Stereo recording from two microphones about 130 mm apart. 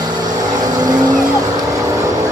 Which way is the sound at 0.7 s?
30° right (ahead or behind).